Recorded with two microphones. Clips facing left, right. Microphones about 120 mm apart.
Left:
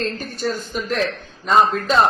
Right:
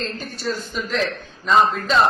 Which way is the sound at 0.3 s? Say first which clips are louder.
Left 1 dB; 50° left (ahead or behind).